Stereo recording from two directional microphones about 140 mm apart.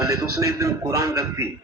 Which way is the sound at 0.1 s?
25° right (ahead or behind).